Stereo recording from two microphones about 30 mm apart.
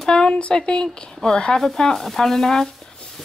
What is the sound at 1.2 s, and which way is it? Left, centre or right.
Speech, left.